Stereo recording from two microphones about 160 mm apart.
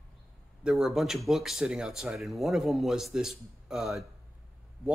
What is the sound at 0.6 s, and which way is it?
Speech, 5° right (ahead or behind).